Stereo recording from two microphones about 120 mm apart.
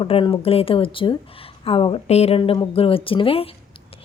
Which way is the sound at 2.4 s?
45° left (ahead or behind).